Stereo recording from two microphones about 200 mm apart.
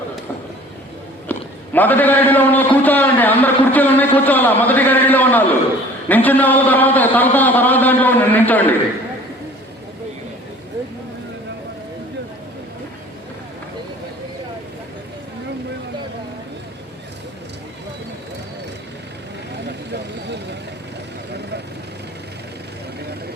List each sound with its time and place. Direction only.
1.3 s a man's voice: 10° left (ahead or behind)
19.9 s vehicle: 60° right (ahead or behind)